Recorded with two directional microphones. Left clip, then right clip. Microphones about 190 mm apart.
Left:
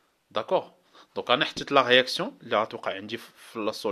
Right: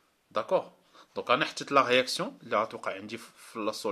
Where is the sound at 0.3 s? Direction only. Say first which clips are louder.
Left 2 dB; 30° left (ahead or behind).